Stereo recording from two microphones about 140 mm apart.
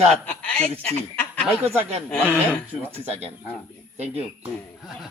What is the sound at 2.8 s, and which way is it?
Speech, 15° right (ahead or behind).